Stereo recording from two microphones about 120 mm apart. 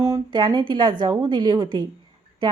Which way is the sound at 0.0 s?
35° right (ahead or behind).